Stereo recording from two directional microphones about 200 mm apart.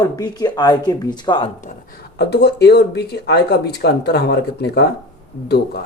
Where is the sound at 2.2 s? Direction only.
55° left (ahead or behind).